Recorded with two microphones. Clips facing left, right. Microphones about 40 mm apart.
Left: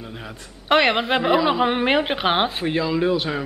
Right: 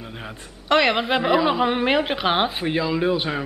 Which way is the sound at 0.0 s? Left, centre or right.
Centre.